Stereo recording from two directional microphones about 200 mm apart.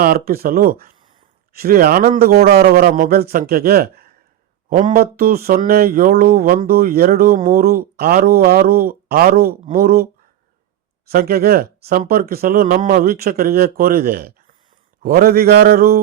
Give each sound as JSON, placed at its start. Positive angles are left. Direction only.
{"t": 0.0, "sound": "speech", "side_deg": -50}
{"t": 11.1, "sound": "speech", "side_deg": -50}